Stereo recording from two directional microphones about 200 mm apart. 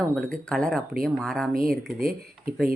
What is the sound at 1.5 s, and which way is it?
Speech, 45° right (ahead or behind).